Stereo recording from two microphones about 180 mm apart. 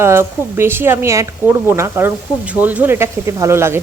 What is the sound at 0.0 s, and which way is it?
Speech, 15° right (ahead or behind).